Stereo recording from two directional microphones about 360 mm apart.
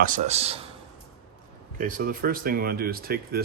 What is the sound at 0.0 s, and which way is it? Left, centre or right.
Speech, centre.